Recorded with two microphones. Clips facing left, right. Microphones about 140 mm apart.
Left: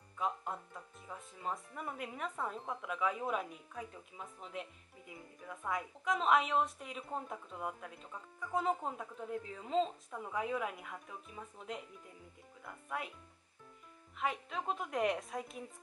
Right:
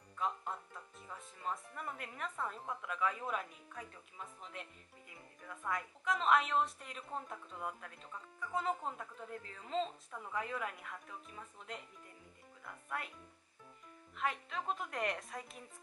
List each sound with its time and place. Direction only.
0.2 s speech: 5° left (ahead or behind)
14.1 s speech: 5° left (ahead or behind)